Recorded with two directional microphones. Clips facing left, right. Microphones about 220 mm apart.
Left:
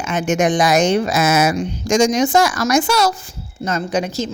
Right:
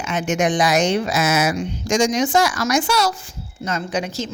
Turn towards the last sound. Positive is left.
turn(degrees=40)  # may be behind; listen again after turning